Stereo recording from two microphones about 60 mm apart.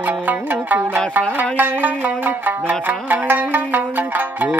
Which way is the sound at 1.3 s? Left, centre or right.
Right.